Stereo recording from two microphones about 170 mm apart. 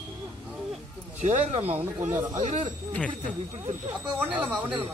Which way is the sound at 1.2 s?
45° right (ahead or behind).